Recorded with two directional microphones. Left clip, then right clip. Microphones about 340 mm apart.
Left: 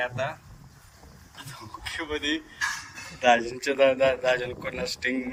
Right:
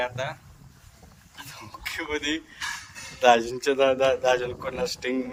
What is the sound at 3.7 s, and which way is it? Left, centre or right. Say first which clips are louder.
A man's voice: even; right.